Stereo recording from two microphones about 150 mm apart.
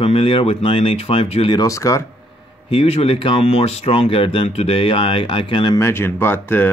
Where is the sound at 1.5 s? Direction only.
25° left (ahead or behind).